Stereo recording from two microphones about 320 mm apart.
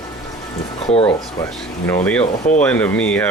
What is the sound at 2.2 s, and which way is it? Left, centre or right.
Speech, left.